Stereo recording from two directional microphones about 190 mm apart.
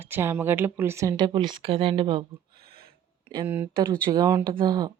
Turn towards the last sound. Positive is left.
turn(degrees=-20)  # may be behind; listen again after turning